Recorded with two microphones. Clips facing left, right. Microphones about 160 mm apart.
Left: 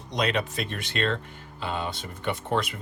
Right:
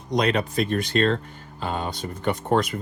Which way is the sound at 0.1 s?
40° right (ahead or behind).